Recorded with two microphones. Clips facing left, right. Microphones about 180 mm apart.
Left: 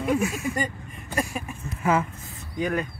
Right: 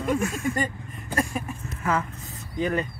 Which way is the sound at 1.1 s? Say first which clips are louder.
Right 1 dB; 10° left (ahead or behind).